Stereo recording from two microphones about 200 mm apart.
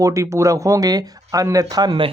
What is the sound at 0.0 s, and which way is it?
Speech, 15° right (ahead or behind).